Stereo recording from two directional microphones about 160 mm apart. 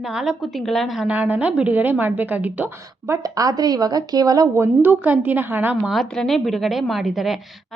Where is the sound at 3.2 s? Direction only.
20° right (ahead or behind).